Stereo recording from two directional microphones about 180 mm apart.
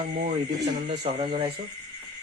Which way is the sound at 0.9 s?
30° right (ahead or behind).